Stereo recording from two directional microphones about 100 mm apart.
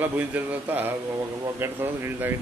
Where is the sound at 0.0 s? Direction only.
15° right (ahead or behind).